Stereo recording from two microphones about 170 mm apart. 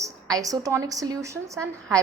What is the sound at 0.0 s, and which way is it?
A woman's voice, 20° right (ahead or behind).